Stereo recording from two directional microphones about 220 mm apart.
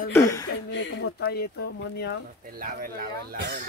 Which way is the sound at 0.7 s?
55° left (ahead or behind).